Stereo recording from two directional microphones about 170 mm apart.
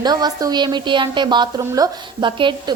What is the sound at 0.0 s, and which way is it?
A woman's voice, 25° right (ahead or behind).